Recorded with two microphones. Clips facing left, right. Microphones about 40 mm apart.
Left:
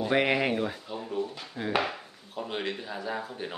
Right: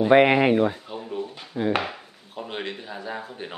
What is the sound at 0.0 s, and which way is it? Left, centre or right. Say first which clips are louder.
Speech: right 9 dB; right.